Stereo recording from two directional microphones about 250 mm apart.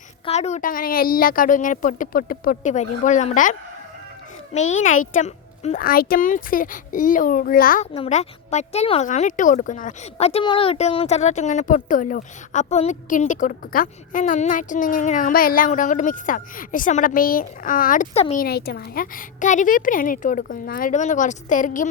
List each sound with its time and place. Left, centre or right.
0.3 s a child's voice: left
4.5 s a child's voice: left